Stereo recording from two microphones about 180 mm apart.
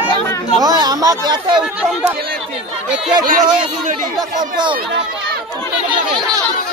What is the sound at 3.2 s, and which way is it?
Speech, 50° right (ahead or behind).